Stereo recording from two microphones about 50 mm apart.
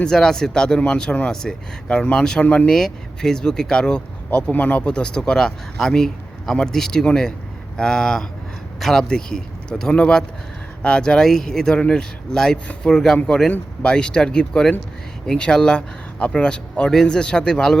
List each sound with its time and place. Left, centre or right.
0.0 s speech: centre
4.5 s speech: left; by 9.0 s centre
9.0 s speech: centre